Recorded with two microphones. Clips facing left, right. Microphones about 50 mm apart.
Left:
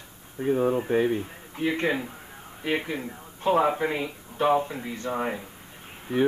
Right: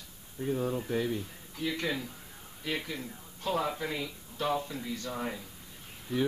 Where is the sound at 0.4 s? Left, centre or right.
Left.